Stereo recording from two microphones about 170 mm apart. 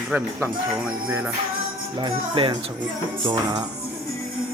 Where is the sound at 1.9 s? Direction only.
30° right (ahead or behind).